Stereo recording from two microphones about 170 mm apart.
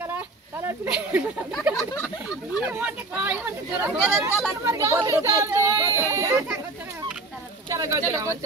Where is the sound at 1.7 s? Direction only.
10° right (ahead or behind).